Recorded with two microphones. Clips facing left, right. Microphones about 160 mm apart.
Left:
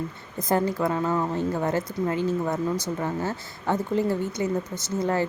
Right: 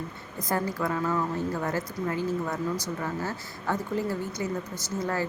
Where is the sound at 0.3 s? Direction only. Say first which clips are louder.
Left 5 dB; 25° left (ahead or behind).